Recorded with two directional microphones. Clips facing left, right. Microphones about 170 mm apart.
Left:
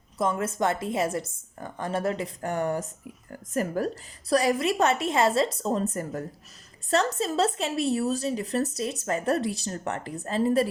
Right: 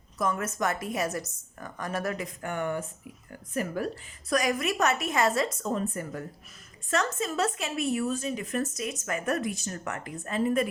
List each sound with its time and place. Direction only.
0.2 s a woman's voice: 25° left (ahead or behind)